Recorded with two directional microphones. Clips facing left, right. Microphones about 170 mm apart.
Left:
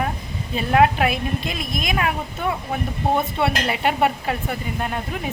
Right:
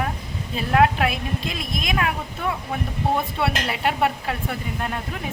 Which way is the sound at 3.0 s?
25° left (ahead or behind).